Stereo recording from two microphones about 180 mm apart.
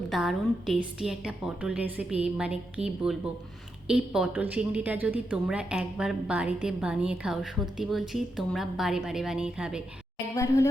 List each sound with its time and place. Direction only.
0.1 s a woman's voice: centre (ahead or behind)
10.3 s speech: 15° left (ahead or behind)